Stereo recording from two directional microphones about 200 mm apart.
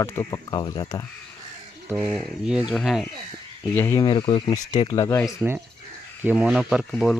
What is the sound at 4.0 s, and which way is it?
Speech, 25° left (ahead or behind).